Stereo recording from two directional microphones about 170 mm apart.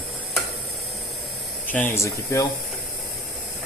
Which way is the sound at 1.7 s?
10° left (ahead or behind).